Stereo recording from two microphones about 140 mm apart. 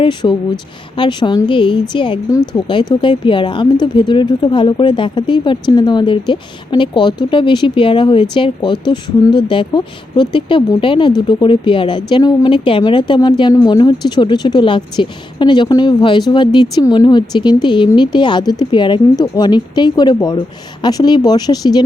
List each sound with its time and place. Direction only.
0.0 s speech: 35° left (ahead or behind)